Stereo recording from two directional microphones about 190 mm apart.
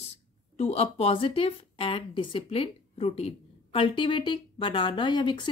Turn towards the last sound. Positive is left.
turn(degrees=25)  # may be behind; listen again after turning